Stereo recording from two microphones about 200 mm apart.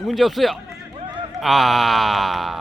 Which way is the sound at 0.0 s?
Centre (ahead or behind).